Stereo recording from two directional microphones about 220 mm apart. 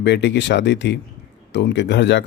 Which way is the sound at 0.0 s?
50° left (ahead or behind).